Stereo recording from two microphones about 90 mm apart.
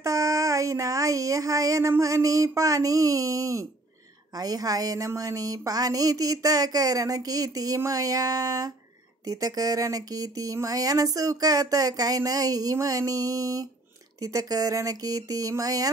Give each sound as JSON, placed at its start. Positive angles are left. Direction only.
{"t": 0.0, "sound": "speech", "side_deg": -40}